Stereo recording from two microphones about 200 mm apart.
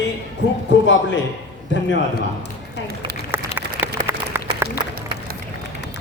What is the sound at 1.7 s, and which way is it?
Speech, 65° left (ahead or behind).